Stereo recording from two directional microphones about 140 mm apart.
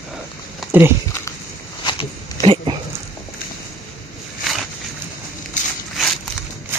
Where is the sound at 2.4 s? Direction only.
35° right (ahead or behind).